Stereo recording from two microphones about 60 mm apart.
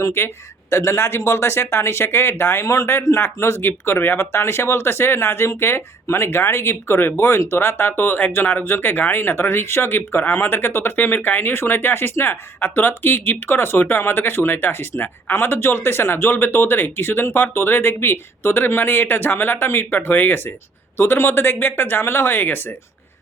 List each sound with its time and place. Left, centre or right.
0.0 s speech: left